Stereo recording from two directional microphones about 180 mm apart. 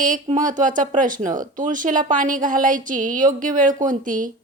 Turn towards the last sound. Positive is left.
turn(degrees=-45)  # may be behind; listen again after turning